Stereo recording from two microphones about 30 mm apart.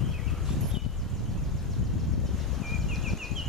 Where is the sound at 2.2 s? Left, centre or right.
Centre.